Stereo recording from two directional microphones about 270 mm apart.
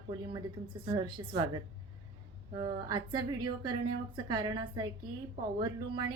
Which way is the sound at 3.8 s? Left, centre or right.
Right.